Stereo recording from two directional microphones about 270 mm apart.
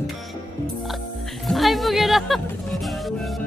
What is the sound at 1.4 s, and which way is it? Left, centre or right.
Music, centre.